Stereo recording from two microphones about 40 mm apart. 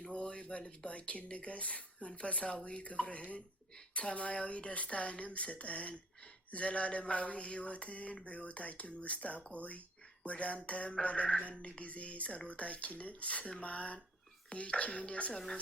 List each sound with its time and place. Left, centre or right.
0.1 s speech: left
0.9 s mantra: left
5.9 s a sound: left
6.5 s mantra: left
15.3 s a woman's voice: centre